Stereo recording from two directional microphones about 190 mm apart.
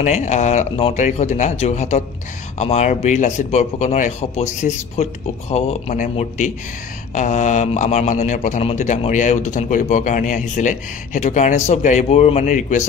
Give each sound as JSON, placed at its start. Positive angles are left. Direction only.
{"t": 0.0, "sound": "a man's voice", "side_deg": 40}